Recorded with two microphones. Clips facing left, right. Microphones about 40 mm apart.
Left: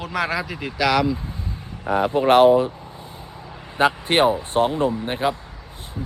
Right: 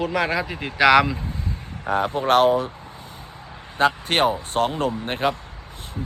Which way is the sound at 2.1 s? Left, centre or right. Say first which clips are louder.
Left 4 dB; left.